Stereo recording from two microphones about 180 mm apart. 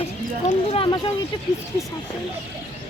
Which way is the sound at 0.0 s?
35° left (ahead or behind).